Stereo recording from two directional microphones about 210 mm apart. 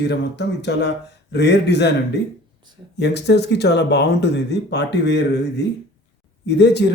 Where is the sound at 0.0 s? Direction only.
55° left (ahead or behind).